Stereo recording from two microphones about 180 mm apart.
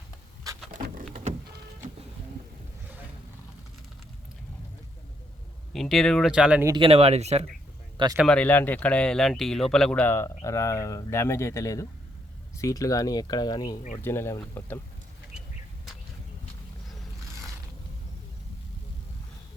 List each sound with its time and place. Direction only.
1.1 s a sound: 40° right (ahead or behind)
5.7 s speech: centre (ahead or behind)
6.7 s speech: 30° right (ahead or behind)
8.1 s speech: 5° right (ahead or behind)
8.4 s speech: 10° left (ahead or behind)